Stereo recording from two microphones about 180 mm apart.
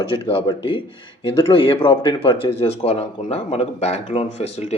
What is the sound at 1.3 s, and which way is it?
A man's voice, 30° left (ahead or behind).